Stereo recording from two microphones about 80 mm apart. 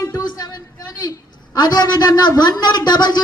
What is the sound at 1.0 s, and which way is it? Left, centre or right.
A woman's voice, left.